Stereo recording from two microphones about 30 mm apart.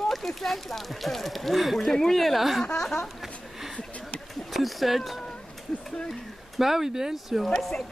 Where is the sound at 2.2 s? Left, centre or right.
Centre.